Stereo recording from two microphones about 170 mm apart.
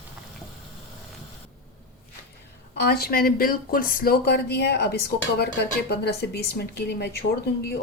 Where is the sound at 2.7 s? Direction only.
65° left (ahead or behind).